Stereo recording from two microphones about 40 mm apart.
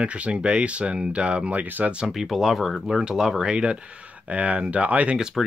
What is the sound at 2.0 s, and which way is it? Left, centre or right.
Speech, centre.